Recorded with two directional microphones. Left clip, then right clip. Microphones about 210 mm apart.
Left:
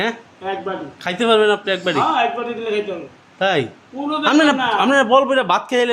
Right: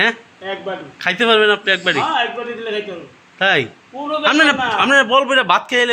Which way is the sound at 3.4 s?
10° left (ahead or behind).